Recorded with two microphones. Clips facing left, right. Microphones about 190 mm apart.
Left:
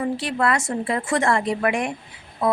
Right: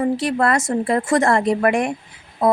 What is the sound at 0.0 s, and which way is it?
A woman's voice, 40° right (ahead or behind).